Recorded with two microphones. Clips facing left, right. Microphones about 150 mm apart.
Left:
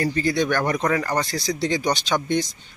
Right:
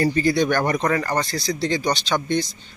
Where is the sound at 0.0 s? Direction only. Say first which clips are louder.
Right 3 dB; 5° right (ahead or behind).